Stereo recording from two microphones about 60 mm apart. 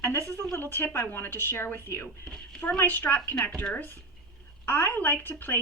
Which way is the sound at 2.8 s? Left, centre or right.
Left.